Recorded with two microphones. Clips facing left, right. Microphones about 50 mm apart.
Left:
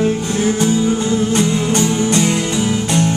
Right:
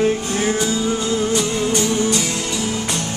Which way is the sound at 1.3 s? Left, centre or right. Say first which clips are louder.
Left 3 dB; left.